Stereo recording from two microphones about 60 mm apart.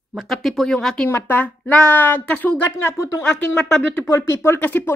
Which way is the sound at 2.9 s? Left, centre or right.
Left.